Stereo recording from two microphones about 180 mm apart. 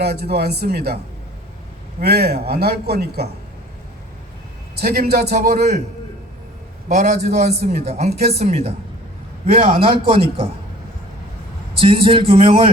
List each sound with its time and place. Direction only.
0.0 s a man's voice: 60° right (ahead or behind)
2.0 s a man's voice: 60° right (ahead or behind)
4.8 s a man's voice: 60° right (ahead or behind)
6.8 s speech: 40° right (ahead or behind)
11.8 s a man's voice: 30° right (ahead or behind)